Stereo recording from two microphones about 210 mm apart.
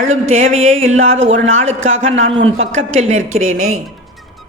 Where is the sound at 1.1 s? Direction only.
65° right (ahead or behind).